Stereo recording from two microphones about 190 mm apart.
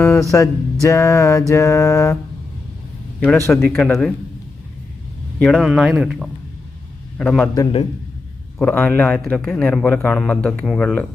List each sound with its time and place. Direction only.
0.0 s music: 10° left (ahead or behind)
3.3 s music: 15° left (ahead or behind)
3.8 s a man's voice: 5° left (ahead or behind)
5.4 s a man's voice: centre (ahead or behind)
7.5 s a man's voice: 20° left (ahead or behind)
8.5 s a man's voice: 10° left (ahead or behind)